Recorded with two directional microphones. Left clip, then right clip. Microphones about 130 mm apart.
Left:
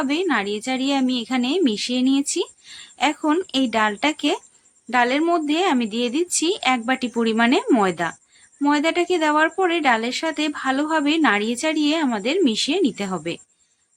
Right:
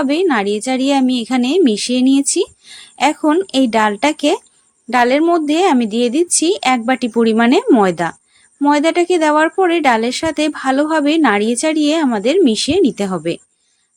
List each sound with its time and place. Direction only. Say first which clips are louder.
0.0 s speech: right 7 dB; 40° right (ahead or behind)